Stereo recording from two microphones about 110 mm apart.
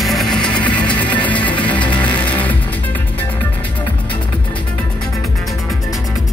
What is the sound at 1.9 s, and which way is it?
Music, 45° left (ahead or behind).